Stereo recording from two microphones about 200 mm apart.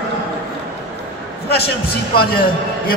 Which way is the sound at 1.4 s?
50° left (ahead or behind).